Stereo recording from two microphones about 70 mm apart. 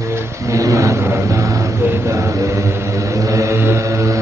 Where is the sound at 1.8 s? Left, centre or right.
Right.